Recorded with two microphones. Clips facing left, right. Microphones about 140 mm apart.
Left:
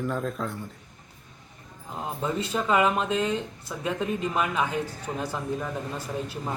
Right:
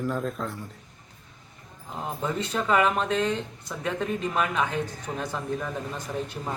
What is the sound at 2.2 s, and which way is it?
Speech, 5° left (ahead or behind).